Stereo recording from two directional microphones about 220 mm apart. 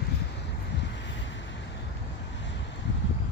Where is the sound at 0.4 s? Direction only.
50° left (ahead or behind).